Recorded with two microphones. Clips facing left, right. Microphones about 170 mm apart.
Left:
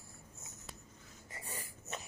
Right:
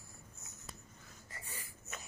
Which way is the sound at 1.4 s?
40° left (ahead or behind).